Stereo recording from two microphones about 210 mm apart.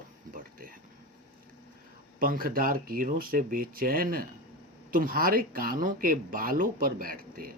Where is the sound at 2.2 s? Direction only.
40° right (ahead or behind).